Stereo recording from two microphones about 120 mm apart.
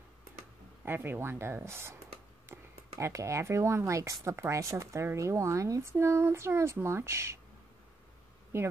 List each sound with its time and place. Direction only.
0.8 s speech: 15° right (ahead or behind)
8.5 s speech: 20° right (ahead or behind)